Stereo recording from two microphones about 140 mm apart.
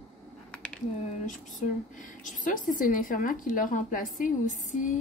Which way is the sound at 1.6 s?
65° left (ahead or behind).